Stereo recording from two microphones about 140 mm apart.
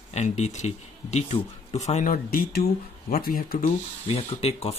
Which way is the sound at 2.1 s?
90° left.